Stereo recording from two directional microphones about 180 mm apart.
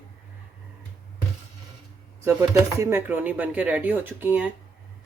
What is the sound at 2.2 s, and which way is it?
Speech, 15° right (ahead or behind).